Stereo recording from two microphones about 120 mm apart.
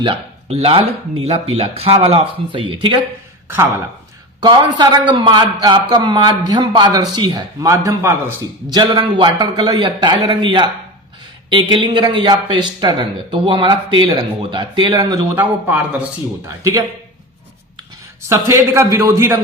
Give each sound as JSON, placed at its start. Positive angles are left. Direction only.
{"t": 0.0, "sound": "speech", "side_deg": -50}
{"t": 4.4, "sound": "a man's voice", "side_deg": -40}
{"t": 8.7, "sound": "a man's voice", "side_deg": -40}
{"t": 11.7, "sound": "a man's voice", "side_deg": -40}
{"t": 15.4, "sound": "a man's voice", "side_deg": -15}
{"t": 18.3, "sound": "a man's voice", "side_deg": -20}